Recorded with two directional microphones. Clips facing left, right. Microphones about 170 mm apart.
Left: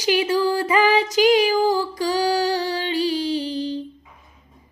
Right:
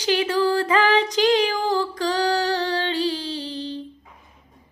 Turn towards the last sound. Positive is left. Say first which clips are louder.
# left 6 dB
turn(degrees=15)  # may be behind; listen again after turning